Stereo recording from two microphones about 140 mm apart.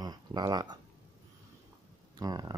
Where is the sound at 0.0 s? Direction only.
30° right (ahead or behind).